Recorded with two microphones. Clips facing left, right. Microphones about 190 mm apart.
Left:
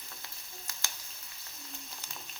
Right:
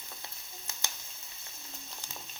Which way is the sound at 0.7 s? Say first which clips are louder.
Right 4 dB; 25° right (ahead or behind).